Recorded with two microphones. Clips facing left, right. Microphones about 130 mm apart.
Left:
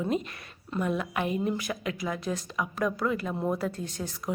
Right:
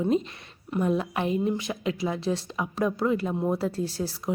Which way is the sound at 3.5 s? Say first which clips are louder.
Right 4 dB; 30° right (ahead or behind).